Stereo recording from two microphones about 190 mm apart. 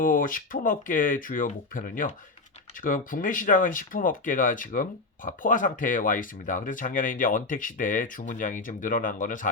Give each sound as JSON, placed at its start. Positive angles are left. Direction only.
{"t": 0.0, "sound": "speech", "side_deg": 45}